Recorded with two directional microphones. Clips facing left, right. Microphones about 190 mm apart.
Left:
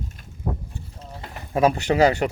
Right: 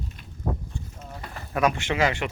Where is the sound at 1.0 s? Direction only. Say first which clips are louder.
Left 1 dB; 25° left (ahead or behind).